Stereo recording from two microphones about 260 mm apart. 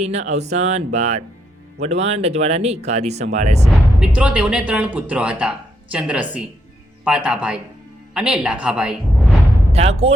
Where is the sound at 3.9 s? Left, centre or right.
Centre.